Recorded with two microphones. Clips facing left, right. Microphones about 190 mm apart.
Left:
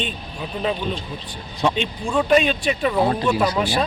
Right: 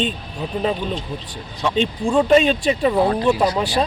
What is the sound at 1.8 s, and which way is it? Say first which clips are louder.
Speech: right 5 dB; 30° right (ahead or behind).